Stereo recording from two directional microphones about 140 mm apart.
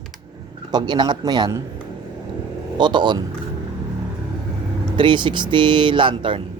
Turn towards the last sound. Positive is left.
turn(degrees=-35)  # may be behind; listen again after turning